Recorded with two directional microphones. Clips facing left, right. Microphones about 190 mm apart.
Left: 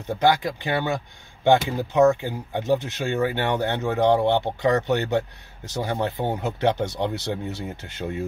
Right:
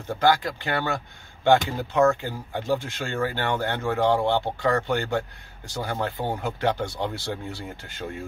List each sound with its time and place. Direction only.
0.2 s speech: 20° left (ahead or behind)